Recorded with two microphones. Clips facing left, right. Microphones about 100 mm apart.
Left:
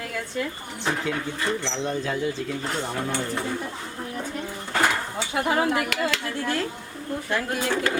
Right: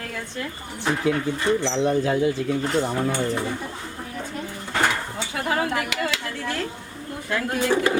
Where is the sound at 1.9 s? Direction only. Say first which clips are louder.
Right 5 dB; 55° right (ahead or behind).